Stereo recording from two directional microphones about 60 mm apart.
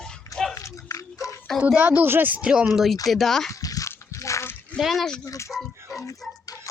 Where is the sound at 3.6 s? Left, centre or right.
Left.